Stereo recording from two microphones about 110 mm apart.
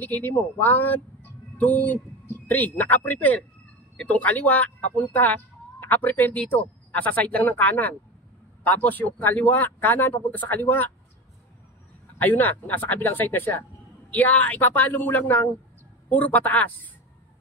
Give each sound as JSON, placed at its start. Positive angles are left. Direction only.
{"t": 0.0, "sound": "speech", "side_deg": 20}
{"t": 12.2, "sound": "speech", "side_deg": 15}